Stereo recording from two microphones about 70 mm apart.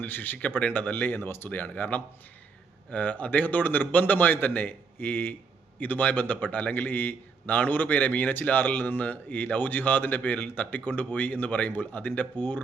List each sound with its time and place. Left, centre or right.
0.0 s a man's voice: left
1.5 s a man's voice: left